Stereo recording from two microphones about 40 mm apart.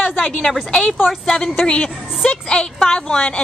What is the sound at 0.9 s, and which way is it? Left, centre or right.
Speech, centre.